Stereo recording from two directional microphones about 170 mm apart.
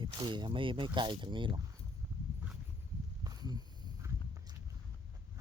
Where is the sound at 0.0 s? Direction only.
25° right (ahead or behind).